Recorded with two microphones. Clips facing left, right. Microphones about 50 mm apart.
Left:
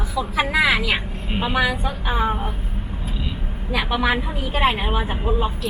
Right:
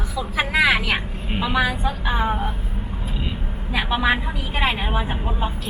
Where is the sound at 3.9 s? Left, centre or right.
Right.